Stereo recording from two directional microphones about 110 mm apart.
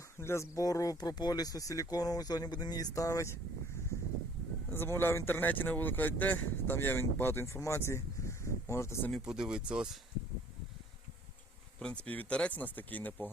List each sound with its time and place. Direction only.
0.2 s speech: 25° left (ahead or behind)
4.7 s speech: 20° left (ahead or behind)
9.1 s speech: 5° right (ahead or behind)
11.8 s speech: 10° left (ahead or behind)